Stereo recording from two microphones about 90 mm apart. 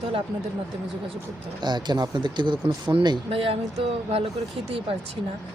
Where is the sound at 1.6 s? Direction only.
50° right (ahead or behind).